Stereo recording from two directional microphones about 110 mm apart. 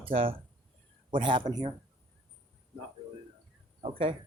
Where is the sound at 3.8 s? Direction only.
60° right (ahead or behind).